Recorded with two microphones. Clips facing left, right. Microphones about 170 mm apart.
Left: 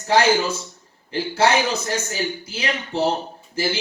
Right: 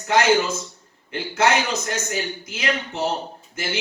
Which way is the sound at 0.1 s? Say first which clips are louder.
Left 1 dB; 30° left (ahead or behind).